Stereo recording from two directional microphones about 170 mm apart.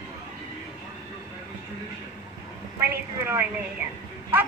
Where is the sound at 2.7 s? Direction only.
15° right (ahead or behind).